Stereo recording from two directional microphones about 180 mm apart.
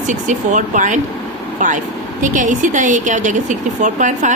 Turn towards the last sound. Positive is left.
turn(degrees=-45)  # may be behind; listen again after turning